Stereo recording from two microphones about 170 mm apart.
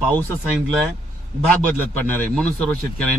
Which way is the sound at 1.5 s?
10° left (ahead or behind).